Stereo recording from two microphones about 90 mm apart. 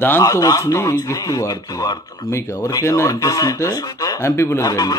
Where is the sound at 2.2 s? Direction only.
30° left (ahead or behind); by 4.2 s 50° left (ahead or behind).